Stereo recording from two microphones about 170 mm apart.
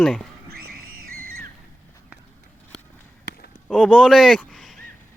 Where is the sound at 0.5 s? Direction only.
65° right (ahead or behind).